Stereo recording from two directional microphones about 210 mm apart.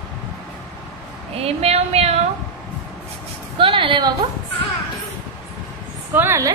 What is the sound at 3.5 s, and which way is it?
Speech, 25° right (ahead or behind).